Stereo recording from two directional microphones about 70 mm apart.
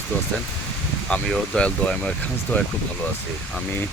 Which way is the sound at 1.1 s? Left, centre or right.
Centre.